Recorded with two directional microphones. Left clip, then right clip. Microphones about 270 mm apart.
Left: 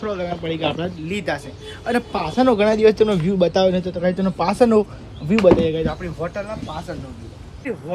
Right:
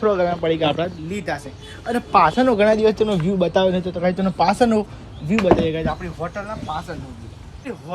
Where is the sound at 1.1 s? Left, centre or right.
Centre.